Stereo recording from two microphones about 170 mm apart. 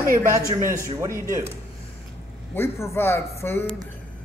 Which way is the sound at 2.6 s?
15° left (ahead or behind).